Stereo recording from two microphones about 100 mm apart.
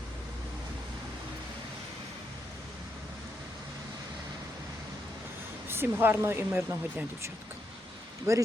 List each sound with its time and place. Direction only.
5.6 s speech: 20° right (ahead or behind)
8.3 s speech: 30° right (ahead or behind)